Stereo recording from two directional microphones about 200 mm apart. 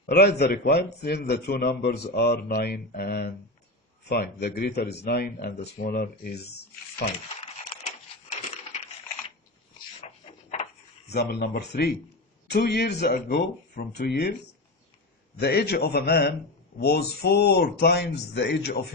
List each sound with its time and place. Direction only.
0.1 s a man's voice: 55° left (ahead or behind)
10.0 s a sound: 35° left (ahead or behind)
11.1 s a man's voice: 55° left (ahead or behind)
15.4 s a man's voice: 55° left (ahead or behind)